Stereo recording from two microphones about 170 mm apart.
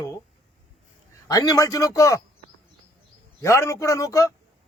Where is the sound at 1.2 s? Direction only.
20° left (ahead or behind).